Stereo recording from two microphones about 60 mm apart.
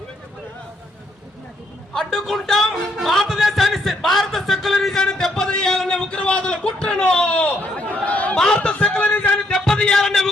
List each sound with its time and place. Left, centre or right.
1.9 s a man's voice: centre; by 9.4 s left
9.5 s music: centre
10.0 s a man's voice: centre